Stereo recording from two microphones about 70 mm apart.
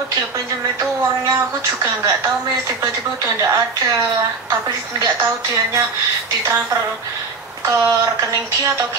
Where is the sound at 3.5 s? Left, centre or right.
Right.